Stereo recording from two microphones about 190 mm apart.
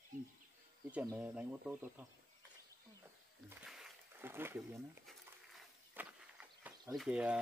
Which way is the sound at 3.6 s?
Centre (ahead or behind).